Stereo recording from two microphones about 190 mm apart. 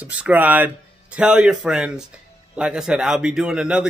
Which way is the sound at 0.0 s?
5° right (ahead or behind).